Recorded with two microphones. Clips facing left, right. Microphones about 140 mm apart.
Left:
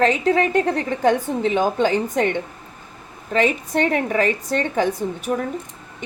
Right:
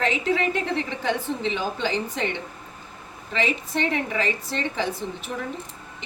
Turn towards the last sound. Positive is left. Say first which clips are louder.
# left 8 dB
turn(degrees=50)  # may be behind; listen again after turning